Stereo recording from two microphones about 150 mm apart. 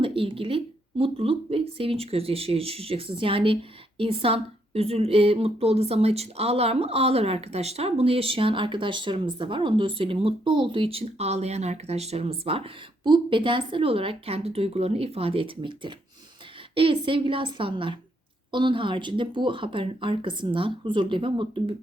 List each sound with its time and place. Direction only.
0.0 s speech: 35° right (ahead or behind)